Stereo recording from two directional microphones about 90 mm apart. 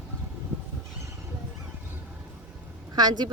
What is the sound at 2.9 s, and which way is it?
Speech, 50° right (ahead or behind).